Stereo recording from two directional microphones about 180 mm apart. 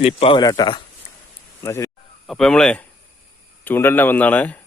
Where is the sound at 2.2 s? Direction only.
Centre (ahead or behind).